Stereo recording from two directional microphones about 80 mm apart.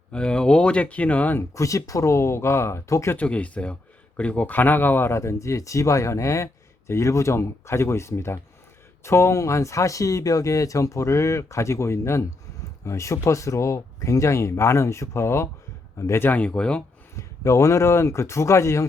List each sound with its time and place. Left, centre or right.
0.1 s speech: centre
1.4 s speech: left
3.2 s speech: centre; by 16.3 s left
16.5 s speech: centre
17.2 s speech: left